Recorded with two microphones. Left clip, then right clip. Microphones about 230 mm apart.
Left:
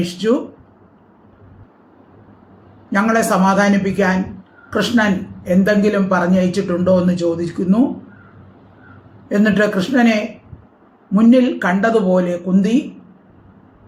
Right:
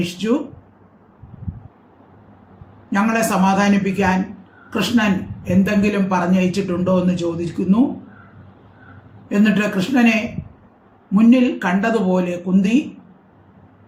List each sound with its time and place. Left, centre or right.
0.0 s a man's voice: centre
2.9 s a man's voice: centre
9.3 s a man's voice: centre
11.1 s a man's voice: centre